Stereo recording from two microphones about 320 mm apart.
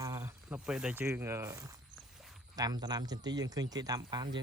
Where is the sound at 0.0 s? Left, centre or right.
Centre.